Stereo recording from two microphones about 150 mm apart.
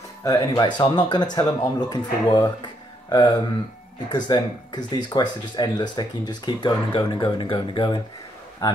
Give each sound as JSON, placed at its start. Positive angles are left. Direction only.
{"t": 0.2, "sound": "speech", "side_deg": 25}